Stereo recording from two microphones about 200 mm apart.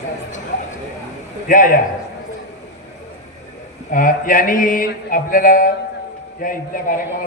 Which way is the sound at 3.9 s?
45° left (ahead or behind).